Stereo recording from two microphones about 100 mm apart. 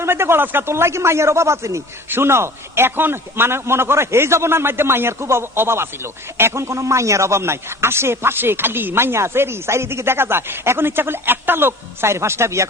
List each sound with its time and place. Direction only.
0.0 s speech: 25° right (ahead or behind)